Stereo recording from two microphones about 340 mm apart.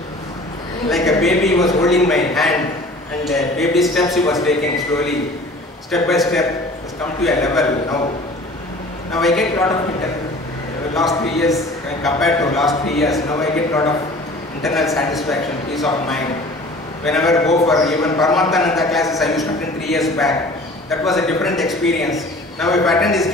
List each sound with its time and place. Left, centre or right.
0.8 s a man's voice: centre
5.9 s a man's voice: centre
9.2 s a man's voice: centre
11.0 s a man's voice: centre